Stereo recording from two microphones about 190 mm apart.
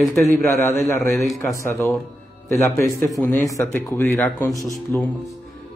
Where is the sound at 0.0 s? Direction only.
10° left (ahead or behind).